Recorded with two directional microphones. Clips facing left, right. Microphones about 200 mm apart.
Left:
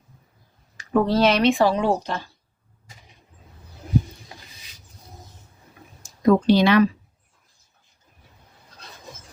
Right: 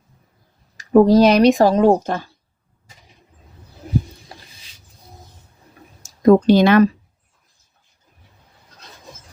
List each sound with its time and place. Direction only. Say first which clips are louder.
0.8 s speech: right 8 dB; 40° right (ahead or behind)
6.0 s speech: right 6 dB; 40° right (ahead or behind)